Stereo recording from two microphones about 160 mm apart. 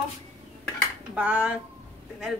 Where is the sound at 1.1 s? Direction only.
5° right (ahead or behind).